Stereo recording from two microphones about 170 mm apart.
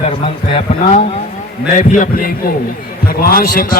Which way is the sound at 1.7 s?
50° left (ahead or behind).